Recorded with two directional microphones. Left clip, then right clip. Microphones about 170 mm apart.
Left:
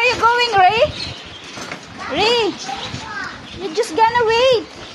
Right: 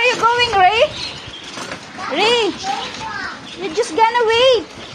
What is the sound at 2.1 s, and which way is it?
Speech, 10° left (ahead or behind).